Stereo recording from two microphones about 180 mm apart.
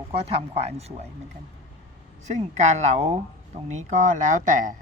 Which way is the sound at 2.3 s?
40° right (ahead or behind).